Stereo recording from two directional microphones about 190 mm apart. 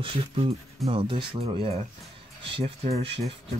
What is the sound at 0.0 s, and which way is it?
Speech, 30° right (ahead or behind).